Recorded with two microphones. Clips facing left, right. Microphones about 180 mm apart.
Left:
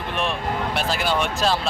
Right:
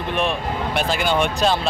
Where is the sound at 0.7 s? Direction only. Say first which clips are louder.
Right 5 dB; centre (ahead or behind).